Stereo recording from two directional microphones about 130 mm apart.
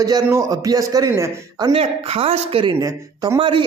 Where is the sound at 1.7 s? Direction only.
50° right (ahead or behind); by 3.4 s 25° right (ahead or behind).